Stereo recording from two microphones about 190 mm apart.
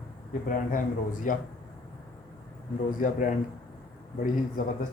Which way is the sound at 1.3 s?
45° left (ahead or behind).